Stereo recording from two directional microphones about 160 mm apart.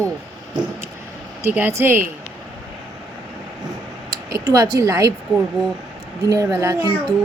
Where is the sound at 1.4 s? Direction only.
15° right (ahead or behind).